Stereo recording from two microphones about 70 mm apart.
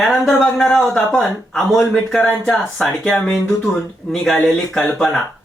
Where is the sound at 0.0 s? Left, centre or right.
Centre.